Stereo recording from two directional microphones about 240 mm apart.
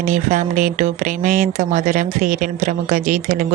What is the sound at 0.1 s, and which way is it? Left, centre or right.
Speech, right.